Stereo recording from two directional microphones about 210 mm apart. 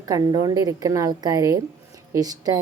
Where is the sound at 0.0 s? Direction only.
20° right (ahead or behind).